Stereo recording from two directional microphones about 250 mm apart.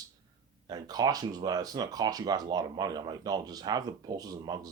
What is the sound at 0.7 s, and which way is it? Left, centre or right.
Speech, centre.